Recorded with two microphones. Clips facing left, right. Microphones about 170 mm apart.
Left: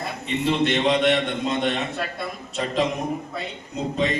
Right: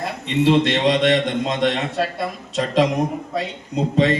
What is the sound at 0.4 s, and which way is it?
A man's voice, 90° right.